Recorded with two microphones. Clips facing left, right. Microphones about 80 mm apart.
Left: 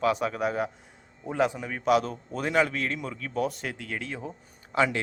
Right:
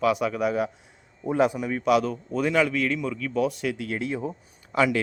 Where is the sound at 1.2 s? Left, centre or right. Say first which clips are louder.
Right 4 dB; right.